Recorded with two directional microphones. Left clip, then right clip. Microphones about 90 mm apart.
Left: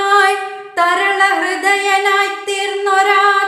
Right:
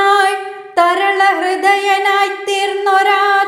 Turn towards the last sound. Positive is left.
turn(degrees=-30)  # may be behind; listen again after turning